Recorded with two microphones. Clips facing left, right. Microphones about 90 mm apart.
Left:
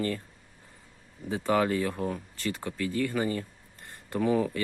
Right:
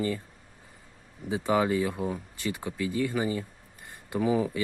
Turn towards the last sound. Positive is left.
turn(degrees=-10)  # may be behind; listen again after turning